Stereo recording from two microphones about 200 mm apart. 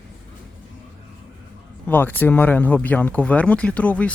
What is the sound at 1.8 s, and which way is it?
Speech, 10° left (ahead or behind).